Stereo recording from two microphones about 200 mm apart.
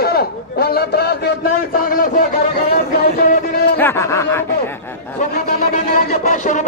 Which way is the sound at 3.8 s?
10° left (ahead or behind).